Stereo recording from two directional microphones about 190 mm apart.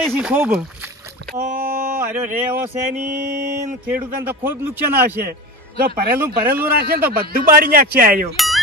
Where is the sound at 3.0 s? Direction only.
40° right (ahead or behind).